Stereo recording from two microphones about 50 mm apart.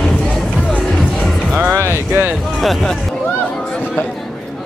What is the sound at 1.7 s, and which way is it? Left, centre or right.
Music, right.